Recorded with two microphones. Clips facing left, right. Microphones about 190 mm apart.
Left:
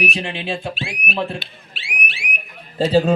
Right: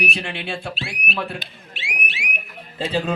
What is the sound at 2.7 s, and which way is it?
Speech, 40° left (ahead or behind).